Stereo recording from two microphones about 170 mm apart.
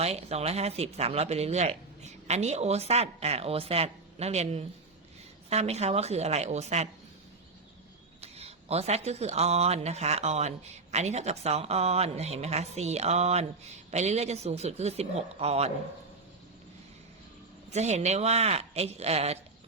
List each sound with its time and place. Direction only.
0.0 s speech: 40° right (ahead or behind)
8.2 s speech: 35° right (ahead or behind)
17.7 s speech: 40° right (ahead or behind)